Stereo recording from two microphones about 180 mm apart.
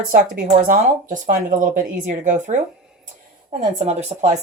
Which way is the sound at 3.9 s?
35° right (ahead or behind).